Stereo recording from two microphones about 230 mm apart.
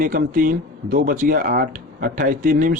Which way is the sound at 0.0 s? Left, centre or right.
Right.